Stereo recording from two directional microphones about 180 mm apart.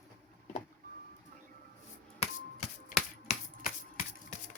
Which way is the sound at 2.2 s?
40° left (ahead or behind).